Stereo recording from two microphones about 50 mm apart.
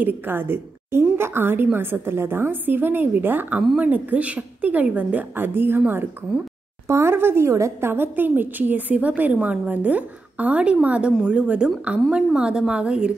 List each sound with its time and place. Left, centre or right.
0.0 s a woman's voice: right
6.9 s speech: right
7.2 s a woman's voice: right
7.9 s a woman's voice: right